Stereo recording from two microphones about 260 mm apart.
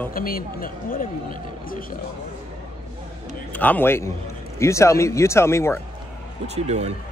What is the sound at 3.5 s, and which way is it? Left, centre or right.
A man's voice, centre.